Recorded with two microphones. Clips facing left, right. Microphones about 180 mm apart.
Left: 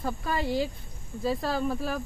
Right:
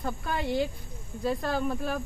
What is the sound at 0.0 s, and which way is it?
Speech, centre (ahead or behind).